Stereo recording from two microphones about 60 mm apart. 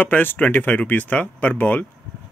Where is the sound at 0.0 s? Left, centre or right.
Left.